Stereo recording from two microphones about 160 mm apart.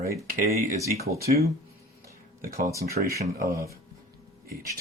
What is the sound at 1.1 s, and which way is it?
Speech, 70° right (ahead or behind).